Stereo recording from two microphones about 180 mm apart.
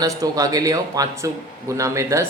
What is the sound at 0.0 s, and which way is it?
A man's voice, 20° right (ahead or behind).